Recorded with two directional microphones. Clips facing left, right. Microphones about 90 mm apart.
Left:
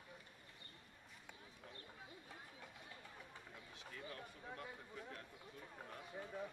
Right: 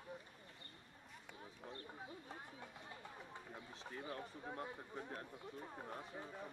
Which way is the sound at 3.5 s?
35° right (ahead or behind).